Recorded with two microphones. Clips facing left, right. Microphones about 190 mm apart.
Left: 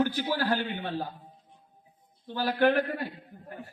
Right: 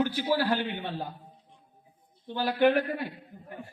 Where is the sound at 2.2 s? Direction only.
15° right (ahead or behind).